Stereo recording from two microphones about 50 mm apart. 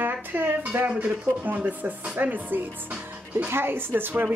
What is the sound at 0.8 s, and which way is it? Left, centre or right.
A woman's voice, right.